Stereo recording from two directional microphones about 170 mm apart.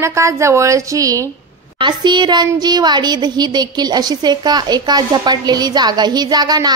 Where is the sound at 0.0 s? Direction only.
15° right (ahead or behind).